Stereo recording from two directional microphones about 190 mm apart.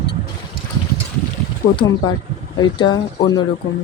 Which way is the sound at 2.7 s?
25° left (ahead or behind).